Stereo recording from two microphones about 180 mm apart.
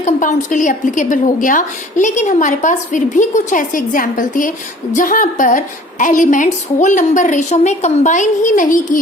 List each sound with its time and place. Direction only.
0.0 s a woman's voice: 45° left (ahead or behind)